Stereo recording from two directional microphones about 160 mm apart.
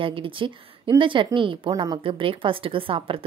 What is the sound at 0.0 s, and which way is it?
A woman's voice, 30° right (ahead or behind).